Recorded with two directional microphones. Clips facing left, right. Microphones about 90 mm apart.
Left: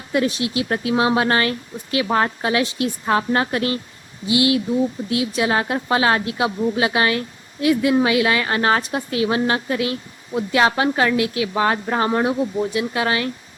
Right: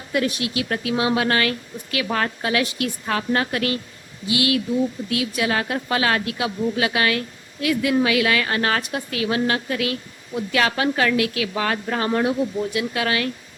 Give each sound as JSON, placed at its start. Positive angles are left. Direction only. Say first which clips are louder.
{"t": 0.1, "sound": "speech", "louder": "left 3 dB", "side_deg": 30}